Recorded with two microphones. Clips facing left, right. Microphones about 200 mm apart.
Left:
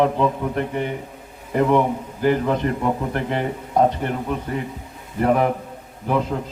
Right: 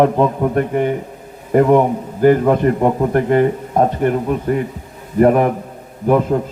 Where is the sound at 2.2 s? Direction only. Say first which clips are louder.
Right 8 dB; 50° right (ahead or behind).